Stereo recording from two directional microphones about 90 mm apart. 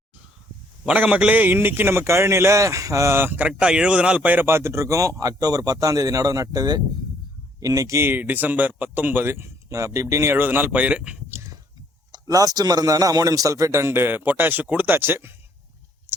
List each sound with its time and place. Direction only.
0.9 s a man's voice: 15° right (ahead or behind); by 8.0 s 35° right (ahead or behind)
8.0 s speech: 20° right (ahead or behind)
11.3 s a sound: 25° right (ahead or behind)
12.1 s a man's voice: 45° right (ahead or behind); by 15.3 s 25° right (ahead or behind)